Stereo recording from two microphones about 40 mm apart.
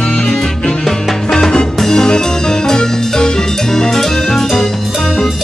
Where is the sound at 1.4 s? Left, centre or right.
Centre.